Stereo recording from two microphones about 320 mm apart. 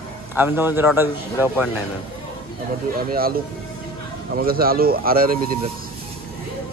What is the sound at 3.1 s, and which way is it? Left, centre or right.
Speech, right.